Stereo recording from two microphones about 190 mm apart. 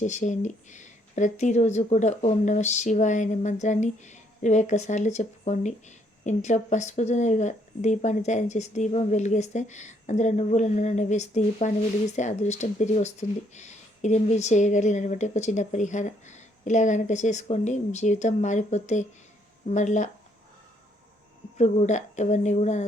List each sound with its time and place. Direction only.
0.0 s speech: 40° left (ahead or behind)
21.6 s speech: 40° left (ahead or behind)